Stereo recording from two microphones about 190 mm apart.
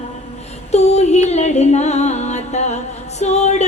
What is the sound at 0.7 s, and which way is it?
Music, 35° left (ahead or behind).